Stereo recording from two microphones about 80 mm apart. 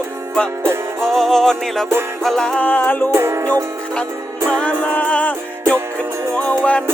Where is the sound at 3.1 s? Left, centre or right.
Right.